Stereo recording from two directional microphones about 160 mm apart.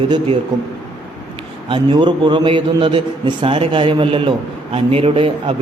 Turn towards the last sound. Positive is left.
turn(degrees=-35)  # may be behind; listen again after turning